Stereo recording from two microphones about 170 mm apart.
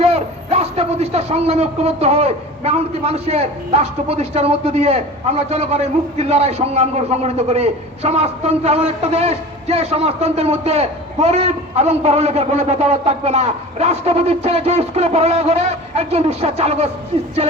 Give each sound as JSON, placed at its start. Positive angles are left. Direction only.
{"t": 0.0, "sound": "a man's voice", "side_deg": -35}